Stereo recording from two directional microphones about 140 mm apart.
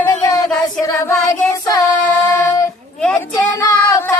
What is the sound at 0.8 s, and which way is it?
Child singing, 20° left (ahead or behind).